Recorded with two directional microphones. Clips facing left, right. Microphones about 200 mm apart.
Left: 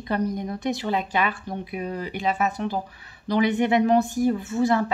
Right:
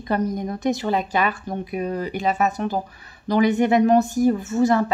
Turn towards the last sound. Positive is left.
turn(degrees=-45)  # may be behind; listen again after turning